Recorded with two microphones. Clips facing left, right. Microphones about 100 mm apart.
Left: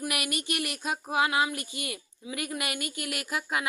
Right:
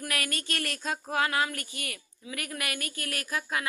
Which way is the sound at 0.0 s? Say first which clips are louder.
Left 2 dB; 15° left (ahead or behind).